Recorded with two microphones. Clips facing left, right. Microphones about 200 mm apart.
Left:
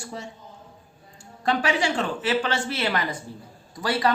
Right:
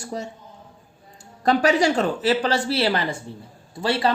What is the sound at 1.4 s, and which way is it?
A woman's voice, 40° right (ahead or behind).